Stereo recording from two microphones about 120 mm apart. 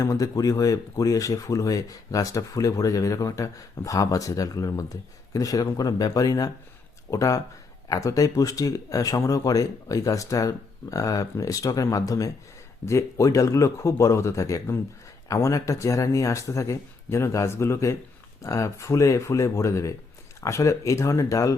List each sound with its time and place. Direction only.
0.0 s speech: 30° left (ahead or behind)